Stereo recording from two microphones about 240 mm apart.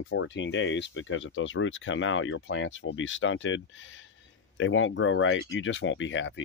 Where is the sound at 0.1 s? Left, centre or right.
Left.